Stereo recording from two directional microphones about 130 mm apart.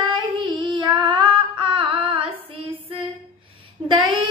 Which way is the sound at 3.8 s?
40° right (ahead or behind).